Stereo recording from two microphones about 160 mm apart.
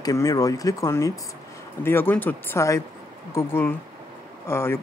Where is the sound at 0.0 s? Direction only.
20° left (ahead or behind).